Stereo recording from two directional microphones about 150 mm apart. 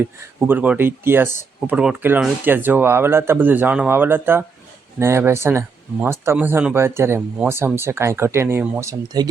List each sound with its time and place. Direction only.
0.0 s speech: 15° right (ahead or behind)